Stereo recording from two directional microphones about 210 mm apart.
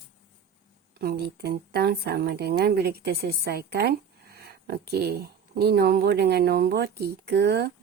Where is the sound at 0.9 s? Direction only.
50° right (ahead or behind).